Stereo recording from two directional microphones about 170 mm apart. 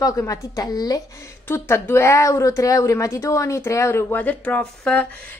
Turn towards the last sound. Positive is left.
turn(degrees=10)  # may be behind; listen again after turning